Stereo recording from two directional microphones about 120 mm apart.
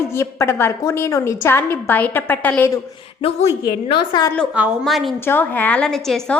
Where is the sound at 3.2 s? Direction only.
55° left (ahead or behind).